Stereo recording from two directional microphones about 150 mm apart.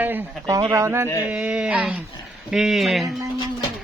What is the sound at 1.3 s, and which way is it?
Speech, 5° right (ahead or behind).